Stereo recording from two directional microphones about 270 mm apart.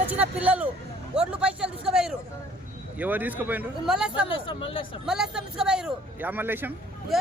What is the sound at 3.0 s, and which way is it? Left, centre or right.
Speech, centre.